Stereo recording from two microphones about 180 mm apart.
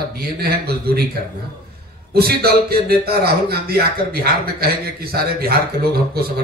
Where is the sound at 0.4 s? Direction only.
60° right (ahead or behind).